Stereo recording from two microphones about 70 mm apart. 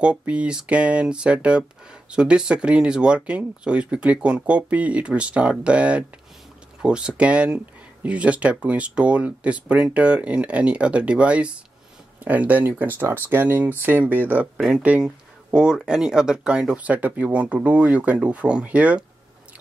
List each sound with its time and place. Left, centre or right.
0.0 s speech: centre